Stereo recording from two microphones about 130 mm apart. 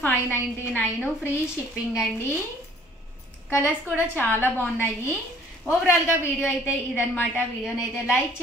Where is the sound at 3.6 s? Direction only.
15° right (ahead or behind).